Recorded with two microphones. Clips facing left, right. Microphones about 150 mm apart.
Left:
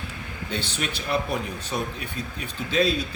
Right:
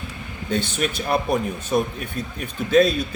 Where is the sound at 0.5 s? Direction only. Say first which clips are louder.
Right 7 dB; 50° right (ahead or behind).